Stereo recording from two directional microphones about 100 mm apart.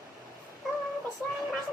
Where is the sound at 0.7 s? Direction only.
Centre (ahead or behind).